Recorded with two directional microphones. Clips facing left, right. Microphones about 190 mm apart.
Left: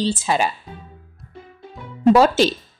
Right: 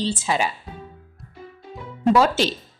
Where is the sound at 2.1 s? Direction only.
40° left (ahead or behind).